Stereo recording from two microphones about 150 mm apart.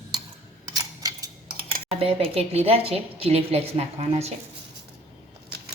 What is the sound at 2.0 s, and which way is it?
A woman's voice, 40° right (ahead or behind).